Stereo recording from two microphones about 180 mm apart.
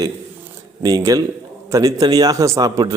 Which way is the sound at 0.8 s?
20° right (ahead or behind).